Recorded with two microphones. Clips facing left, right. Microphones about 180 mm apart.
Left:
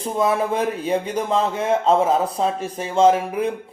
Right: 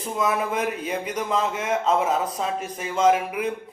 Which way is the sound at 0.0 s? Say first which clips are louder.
Left 4 dB; 30° left (ahead or behind).